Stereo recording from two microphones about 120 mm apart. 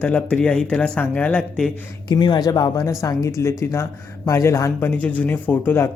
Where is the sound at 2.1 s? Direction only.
40° left (ahead or behind).